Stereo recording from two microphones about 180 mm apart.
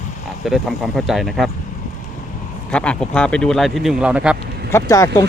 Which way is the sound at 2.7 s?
5° left (ahead or behind).